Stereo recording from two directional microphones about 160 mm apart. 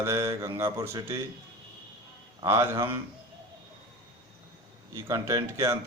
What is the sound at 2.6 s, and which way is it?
Speech, 15° right (ahead or behind).